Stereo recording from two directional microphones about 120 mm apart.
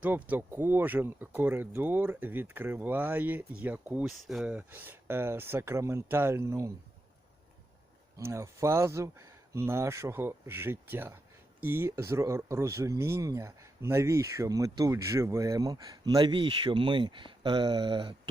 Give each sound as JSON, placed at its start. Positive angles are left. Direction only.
{"t": 0.0, "sound": "speech", "side_deg": -15}
{"t": 4.0, "sound": "speech", "side_deg": 0}
{"t": 8.2, "sound": "speech", "side_deg": -25}